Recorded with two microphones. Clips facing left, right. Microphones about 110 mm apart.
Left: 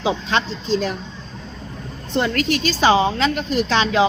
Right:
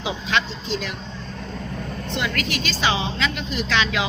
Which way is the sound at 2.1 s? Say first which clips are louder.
Left 7 dB; 40° left (ahead or behind).